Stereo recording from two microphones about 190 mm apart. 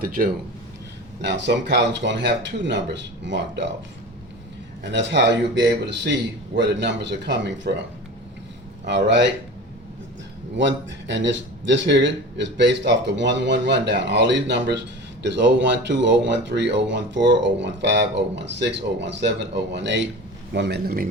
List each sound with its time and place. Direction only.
0.0 s speech: 50° right (ahead or behind)
1.2 s speech: 65° right (ahead or behind)
4.9 s speech: 70° right (ahead or behind)
9.0 s speech: 65° right (ahead or behind)
10.6 s speech: 70° right (ahead or behind); by 21.1 s 50° right (ahead or behind)